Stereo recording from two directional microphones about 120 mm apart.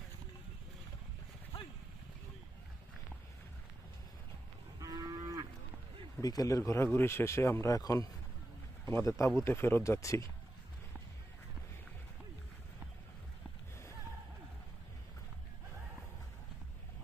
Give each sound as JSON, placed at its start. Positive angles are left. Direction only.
{"t": 4.8, "sound": "moo", "side_deg": -30}
{"t": 6.2, "sound": "speech", "side_deg": 30}